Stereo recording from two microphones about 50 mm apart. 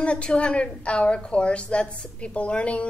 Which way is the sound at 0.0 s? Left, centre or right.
Left.